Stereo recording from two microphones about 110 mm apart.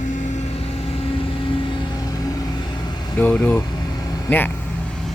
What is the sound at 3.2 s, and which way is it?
Speech, 15° left (ahead or behind).